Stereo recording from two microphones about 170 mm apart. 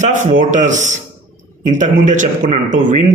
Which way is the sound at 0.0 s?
50° right (ahead or behind).